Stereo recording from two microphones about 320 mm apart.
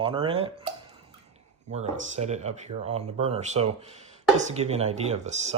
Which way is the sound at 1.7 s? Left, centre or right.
Right.